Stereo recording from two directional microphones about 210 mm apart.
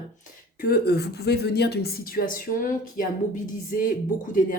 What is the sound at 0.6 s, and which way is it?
A woman's voice, 50° left (ahead or behind).